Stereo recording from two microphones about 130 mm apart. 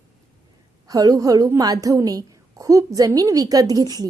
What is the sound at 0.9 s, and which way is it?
A woman's voice, 30° right (ahead or behind).